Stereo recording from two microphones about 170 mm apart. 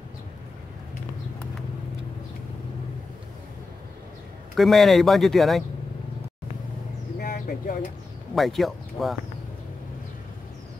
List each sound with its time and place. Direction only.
4.6 s speech: centre (ahead or behind)
7.2 s a sound: 60° left (ahead or behind)
8.4 s speech: centre (ahead or behind)